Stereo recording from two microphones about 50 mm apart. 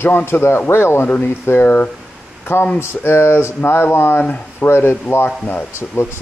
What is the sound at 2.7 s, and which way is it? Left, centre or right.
Speech, left.